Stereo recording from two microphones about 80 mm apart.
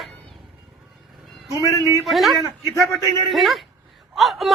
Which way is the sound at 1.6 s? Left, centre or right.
Left.